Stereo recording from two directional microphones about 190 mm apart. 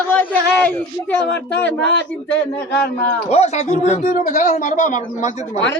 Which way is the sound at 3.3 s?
35° left (ahead or behind).